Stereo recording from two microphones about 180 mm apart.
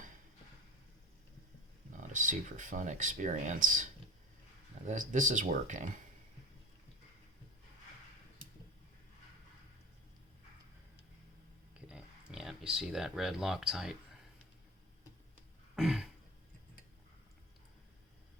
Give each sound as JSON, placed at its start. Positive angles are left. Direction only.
{"t": 1.9, "sound": "speech", "side_deg": -45}
{"t": 4.9, "sound": "speech", "side_deg": -45}
{"t": 11.7, "sound": "speech", "side_deg": -5}
{"t": 15.7, "sound": "throat clearing", "side_deg": -5}